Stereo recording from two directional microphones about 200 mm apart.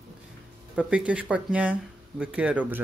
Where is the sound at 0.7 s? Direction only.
5° right (ahead or behind).